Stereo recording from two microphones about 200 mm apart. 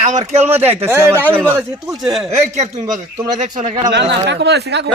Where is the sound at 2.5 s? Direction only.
35° right (ahead or behind).